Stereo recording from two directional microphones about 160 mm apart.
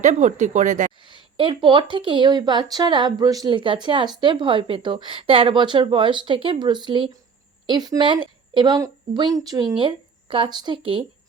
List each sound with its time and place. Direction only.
0.0 s speech: 45° right (ahead or behind)
1.0 s a woman's voice: 30° right (ahead or behind)